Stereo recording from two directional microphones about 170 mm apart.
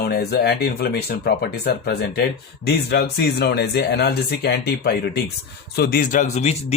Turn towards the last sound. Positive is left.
turn(degrees=40)  # may be behind; listen again after turning